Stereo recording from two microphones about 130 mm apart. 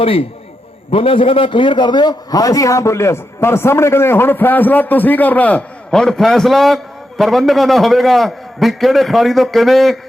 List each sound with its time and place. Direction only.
0.0 s a man's voice: 45° left (ahead or behind); by 10.0 s centre (ahead or behind)